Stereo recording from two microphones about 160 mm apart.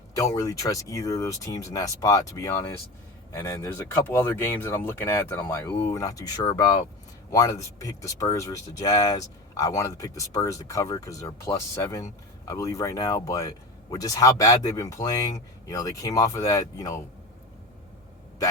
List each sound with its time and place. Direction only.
0.3 s speech: 20° left (ahead or behind)